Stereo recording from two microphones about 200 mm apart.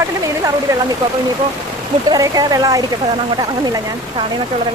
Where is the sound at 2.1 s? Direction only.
20° right (ahead or behind).